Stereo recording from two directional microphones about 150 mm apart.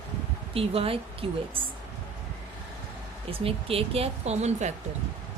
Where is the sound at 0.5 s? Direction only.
40° right (ahead or behind).